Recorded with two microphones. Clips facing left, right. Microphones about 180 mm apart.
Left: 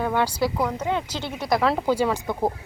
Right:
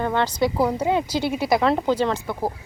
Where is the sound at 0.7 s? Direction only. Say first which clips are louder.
Right 5 dB; 10° right (ahead or behind).